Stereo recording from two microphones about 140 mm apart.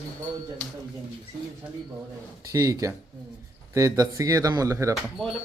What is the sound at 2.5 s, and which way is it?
Speech, 25° right (ahead or behind).